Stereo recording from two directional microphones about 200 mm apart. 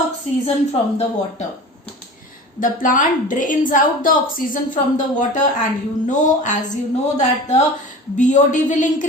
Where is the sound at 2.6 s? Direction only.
40° left (ahead or behind).